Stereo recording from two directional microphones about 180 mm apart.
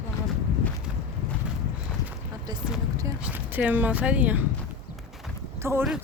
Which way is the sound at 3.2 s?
10° right (ahead or behind).